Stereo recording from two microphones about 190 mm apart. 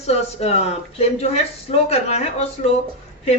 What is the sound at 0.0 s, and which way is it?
Speech, 35° left (ahead or behind).